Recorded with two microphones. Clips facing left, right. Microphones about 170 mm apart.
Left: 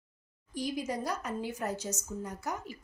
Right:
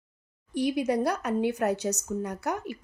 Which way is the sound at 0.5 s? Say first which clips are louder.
Right 9 dB; 65° right (ahead or behind).